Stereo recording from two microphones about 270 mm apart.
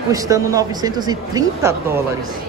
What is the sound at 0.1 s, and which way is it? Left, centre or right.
A woman's voice, centre.